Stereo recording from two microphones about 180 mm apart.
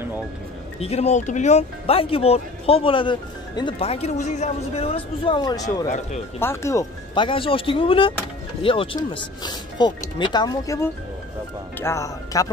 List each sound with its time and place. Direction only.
0.7 s speech: 35° left (ahead or behind)
5.9 s speech: 40° left (ahead or behind)
6.4 s speech: 15° left (ahead or behind)
7.2 s speech: 30° left (ahead or behind)